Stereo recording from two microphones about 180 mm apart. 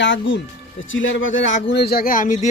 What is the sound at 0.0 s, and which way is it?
A man's voice, 90° left.